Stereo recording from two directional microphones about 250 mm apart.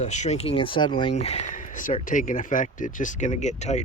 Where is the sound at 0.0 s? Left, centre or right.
Left.